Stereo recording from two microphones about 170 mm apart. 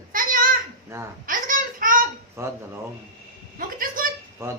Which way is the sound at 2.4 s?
15° right (ahead or behind).